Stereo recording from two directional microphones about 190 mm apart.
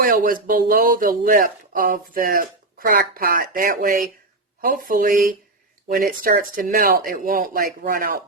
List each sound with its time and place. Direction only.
0.0 s speech: 45° right (ahead or behind)